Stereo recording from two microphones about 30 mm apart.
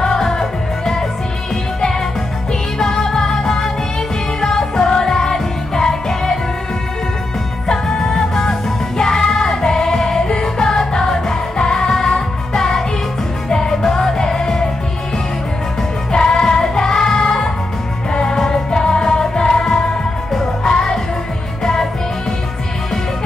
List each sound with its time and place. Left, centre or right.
0.0 s music: left
2.9 s music: centre
7.6 s music: centre
8.9 s music: left
16.1 s music: left